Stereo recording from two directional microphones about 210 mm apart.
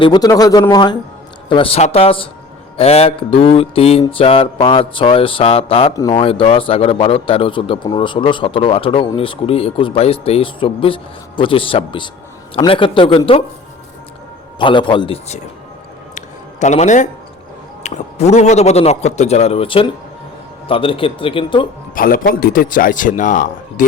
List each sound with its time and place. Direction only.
0.0 s a man's voice: 20° left (ahead or behind)
14.6 s a man's voice: 25° left (ahead or behind)
16.1 s music: 35° left (ahead or behind)
17.8 s a man's voice: 30° left (ahead or behind)
21.9 s a man's voice: 40° left (ahead or behind)